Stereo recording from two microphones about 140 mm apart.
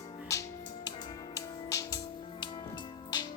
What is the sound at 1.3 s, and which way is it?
Music, 25° left (ahead or behind).